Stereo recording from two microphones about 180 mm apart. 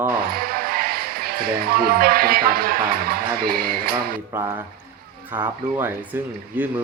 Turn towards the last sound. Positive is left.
turn(degrees=-10)  # may be behind; listen again after turning